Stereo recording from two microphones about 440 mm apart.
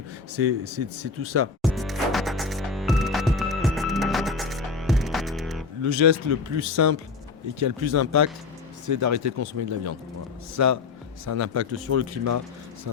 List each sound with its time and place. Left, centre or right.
0.3 s a man's voice: right
1.6 s music: centre
5.8 s a man's voice: right